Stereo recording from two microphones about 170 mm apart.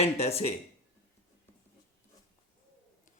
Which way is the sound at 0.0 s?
35° left (ahead or behind).